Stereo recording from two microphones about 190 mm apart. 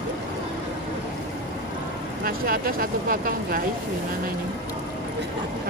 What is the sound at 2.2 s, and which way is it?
Speech, 50° right (ahead or behind).